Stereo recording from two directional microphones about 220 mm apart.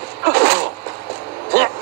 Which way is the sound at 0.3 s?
45° right (ahead or behind).